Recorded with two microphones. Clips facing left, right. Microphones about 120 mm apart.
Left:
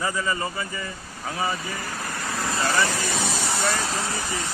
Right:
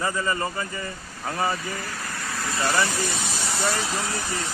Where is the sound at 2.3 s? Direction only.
25° left (ahead or behind).